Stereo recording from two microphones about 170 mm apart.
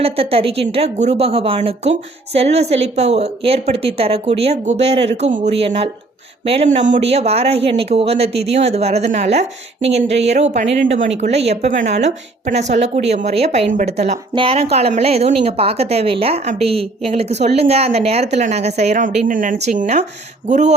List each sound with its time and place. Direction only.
0.0 s a woman's voice: 35° right (ahead or behind)